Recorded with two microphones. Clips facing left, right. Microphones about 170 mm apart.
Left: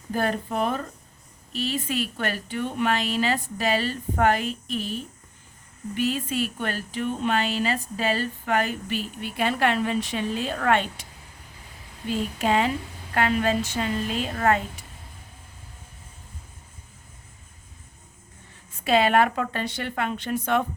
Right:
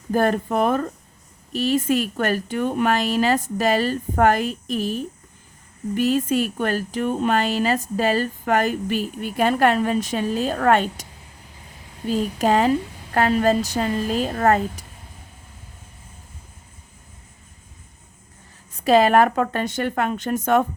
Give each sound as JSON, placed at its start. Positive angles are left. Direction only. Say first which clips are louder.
{"t": 0.1, "sound": "speech", "louder": "right 6 dB", "side_deg": -45}
{"t": 12.0, "sound": "a woman's voice", "louder": "right 5 dB", "side_deg": -40}
{"t": 18.7, "sound": "speech", "louder": "right 5 dB", "side_deg": -40}